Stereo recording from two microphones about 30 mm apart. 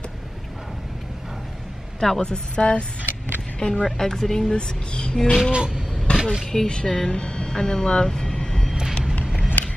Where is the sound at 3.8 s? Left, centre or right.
Centre.